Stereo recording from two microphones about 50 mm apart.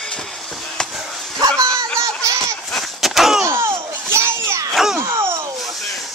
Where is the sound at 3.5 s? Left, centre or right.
Right.